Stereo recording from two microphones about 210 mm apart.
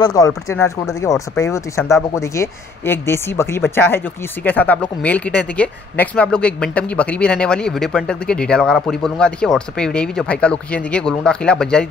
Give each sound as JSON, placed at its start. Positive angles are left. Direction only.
{"t": 0.0, "sound": "speech", "side_deg": 15}